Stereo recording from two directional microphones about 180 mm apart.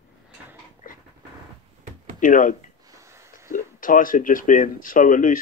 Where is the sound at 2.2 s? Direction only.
50° left (ahead or behind).